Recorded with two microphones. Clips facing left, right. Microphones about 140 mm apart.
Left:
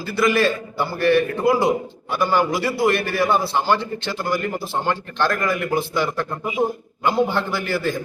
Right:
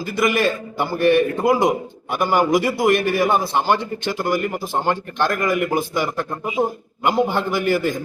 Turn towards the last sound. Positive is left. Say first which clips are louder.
# right 4 dB
turn(degrees=-15)  # may be behind; listen again after turning